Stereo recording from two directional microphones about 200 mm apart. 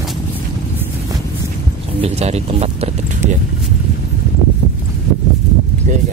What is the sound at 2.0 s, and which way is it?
Speech, 30° right (ahead or behind).